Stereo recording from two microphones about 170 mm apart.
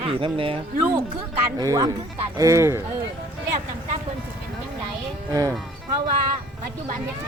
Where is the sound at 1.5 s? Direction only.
20° right (ahead or behind).